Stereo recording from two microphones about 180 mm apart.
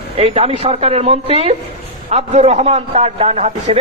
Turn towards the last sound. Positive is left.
turn(degrees=-35)  # may be behind; listen again after turning